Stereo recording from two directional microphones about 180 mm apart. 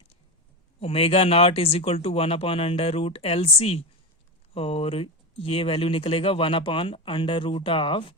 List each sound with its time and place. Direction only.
0.8 s speech: 35° left (ahead or behind)